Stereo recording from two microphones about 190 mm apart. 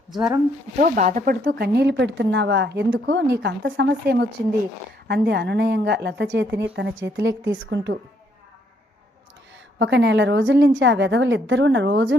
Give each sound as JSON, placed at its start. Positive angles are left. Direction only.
{"t": 0.1, "sound": "speech", "side_deg": -5}
{"t": 0.8, "sound": "a woman's voice", "side_deg": -45}
{"t": 9.7, "sound": "a woman's voice", "side_deg": -70}